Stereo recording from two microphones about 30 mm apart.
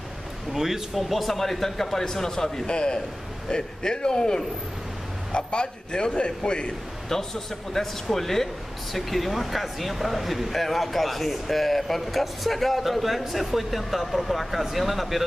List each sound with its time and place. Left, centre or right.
0.5 s speech: centre
0.9 s speech: centre
2.6 s a man's voice: left
7.1 s speech: centre